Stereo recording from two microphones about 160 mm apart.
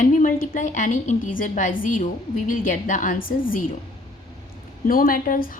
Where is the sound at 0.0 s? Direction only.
55° left (ahead or behind).